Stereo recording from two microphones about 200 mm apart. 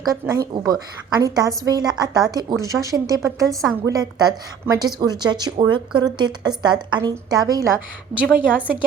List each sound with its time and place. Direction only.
0.0 s a woman's voice: 20° right (ahead or behind)
8.1 s speech: 5° right (ahead or behind)